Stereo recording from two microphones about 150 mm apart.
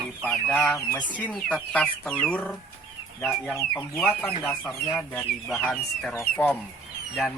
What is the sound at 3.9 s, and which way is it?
Speech, 10° left (ahead or behind).